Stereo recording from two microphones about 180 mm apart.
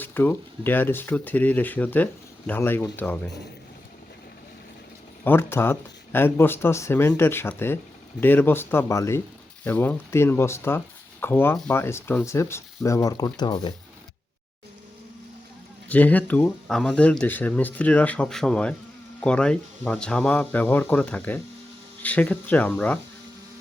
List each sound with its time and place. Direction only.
0.0 s speech: 10° left (ahead or behind)
5.2 s speech: 10° left (ahead or behind)
15.9 s speech: 10° left (ahead or behind)